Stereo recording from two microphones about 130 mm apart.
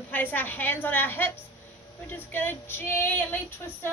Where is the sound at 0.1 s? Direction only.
15° left (ahead or behind).